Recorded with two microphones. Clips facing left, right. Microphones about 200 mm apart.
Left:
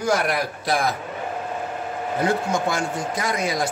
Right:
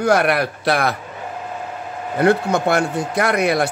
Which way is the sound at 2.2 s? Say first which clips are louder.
Right 7 dB; 65° right (ahead or behind).